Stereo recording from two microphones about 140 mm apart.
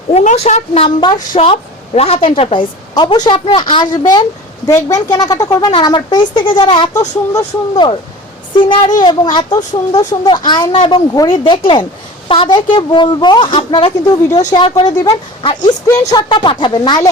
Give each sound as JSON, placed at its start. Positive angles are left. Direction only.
{"t": 0.1, "sound": "a woman's voice", "side_deg": 50}